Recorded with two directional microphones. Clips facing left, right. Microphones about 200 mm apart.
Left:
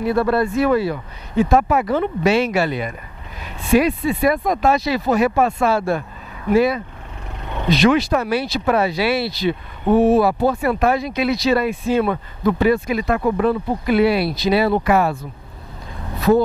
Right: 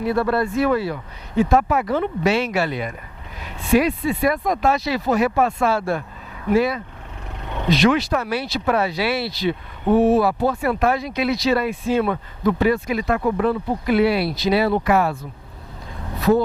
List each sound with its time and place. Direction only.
0.0 s speech: 15° left (ahead or behind)
7.4 s a sound: 25° left (ahead or behind)
7.7 s speech: 10° left (ahead or behind)
9.8 s speech: 25° left (ahead or behind)
10.2 s speech: 15° left (ahead or behind)